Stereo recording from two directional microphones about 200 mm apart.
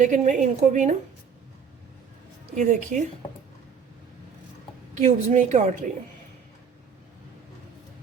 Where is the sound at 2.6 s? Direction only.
40° right (ahead or behind).